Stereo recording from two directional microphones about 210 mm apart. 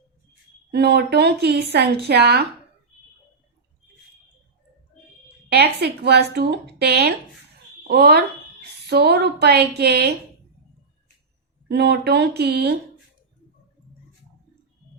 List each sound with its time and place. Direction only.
0.7 s a woman's voice: 50° right (ahead or behind)
5.5 s a woman's voice: 50° right (ahead or behind)
11.7 s a woman's voice: 50° right (ahead or behind)